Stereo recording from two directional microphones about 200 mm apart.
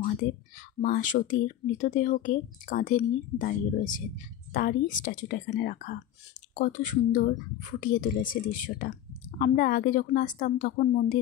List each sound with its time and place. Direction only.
0.7 s a woman's voice: 45° left (ahead or behind)